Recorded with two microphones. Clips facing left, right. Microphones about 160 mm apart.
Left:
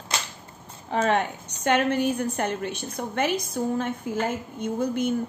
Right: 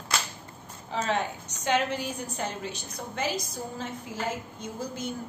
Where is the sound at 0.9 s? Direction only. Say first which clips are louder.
Left 6 dB; 60° left (ahead or behind).